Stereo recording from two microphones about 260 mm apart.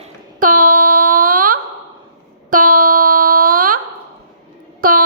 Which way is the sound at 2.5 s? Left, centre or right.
Right.